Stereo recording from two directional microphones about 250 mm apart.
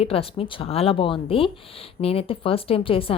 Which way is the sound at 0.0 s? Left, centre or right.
Left.